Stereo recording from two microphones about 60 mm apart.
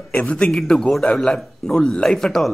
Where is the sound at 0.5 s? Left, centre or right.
Centre.